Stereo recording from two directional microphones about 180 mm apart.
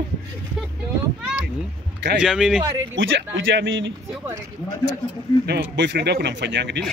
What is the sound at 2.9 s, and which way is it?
Speech, 90° right.